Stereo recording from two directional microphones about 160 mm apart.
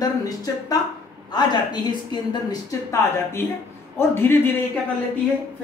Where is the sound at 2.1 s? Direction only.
25° left (ahead or behind).